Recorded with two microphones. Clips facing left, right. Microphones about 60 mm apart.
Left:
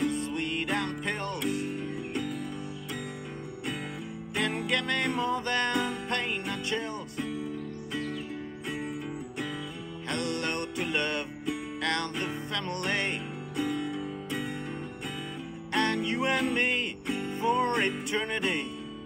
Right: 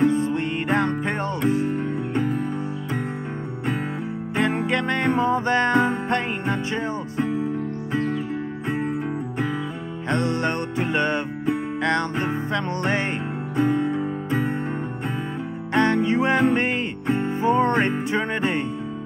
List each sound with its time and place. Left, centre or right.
0.0 s music: right
4.4 s music: right
10.0 s music: right
15.7 s music: right